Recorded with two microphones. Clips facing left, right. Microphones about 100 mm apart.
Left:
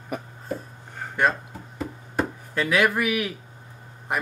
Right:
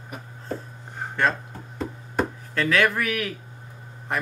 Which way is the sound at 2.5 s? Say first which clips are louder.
Even; 15° left (ahead or behind).